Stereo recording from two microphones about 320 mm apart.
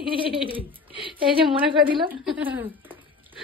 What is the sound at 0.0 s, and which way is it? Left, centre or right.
Speech, centre.